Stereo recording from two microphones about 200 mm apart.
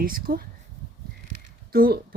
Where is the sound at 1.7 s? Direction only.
50° right (ahead or behind).